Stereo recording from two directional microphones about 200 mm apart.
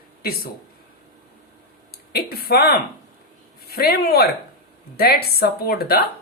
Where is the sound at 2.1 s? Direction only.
50° left (ahead or behind).